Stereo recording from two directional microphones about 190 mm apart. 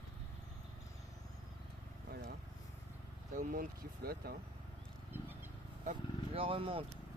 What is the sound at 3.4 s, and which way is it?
Speech, 45° right (ahead or behind).